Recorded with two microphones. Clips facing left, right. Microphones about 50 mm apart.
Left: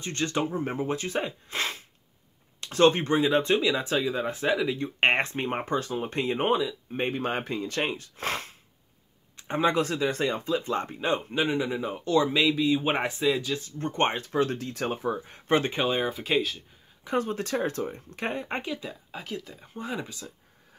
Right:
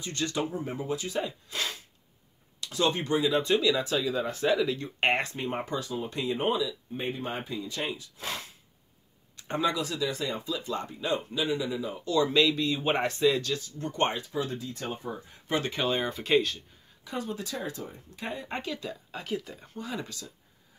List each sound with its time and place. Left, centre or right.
0.0 s speech: left; by 4.7 s centre
4.7 s speech: left
7.0 s speech: left
9.4 s a sound: left
9.7 s speech: left
12.3 s speech: centre
13.6 s speech: left
14.3 s speech: left
15.2 s speech: left
15.8 s speech: centre
17.0 s speech: left
18.6 s speech: centre
19.2 s speech: centre
20.0 s speech: left